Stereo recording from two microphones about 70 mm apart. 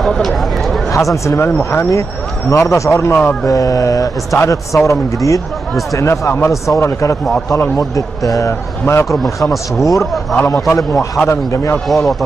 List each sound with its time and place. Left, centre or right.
0.0 s a sound: centre
0.9 s a man's voice: left
3.4 s mantra: left
4.4 s a man's voice: left
9.2 s speech: centre
10.3 s a man's voice: left
11.9 s speech: centre